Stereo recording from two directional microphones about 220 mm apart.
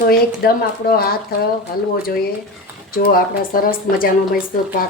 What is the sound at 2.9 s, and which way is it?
Speech, 40° left (ahead or behind).